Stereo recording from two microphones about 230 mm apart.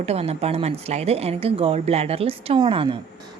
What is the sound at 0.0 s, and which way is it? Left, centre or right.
A woman's voice, right.